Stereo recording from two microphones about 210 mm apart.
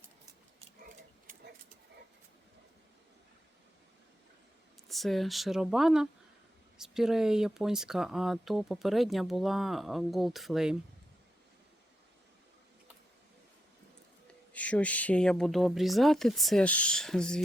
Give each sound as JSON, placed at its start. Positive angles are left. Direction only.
{"t": 0.8, "sound": "a sound", "side_deg": -40}
{"t": 4.9, "sound": "speech", "side_deg": 0}
{"t": 14.5, "sound": "speech", "side_deg": 5}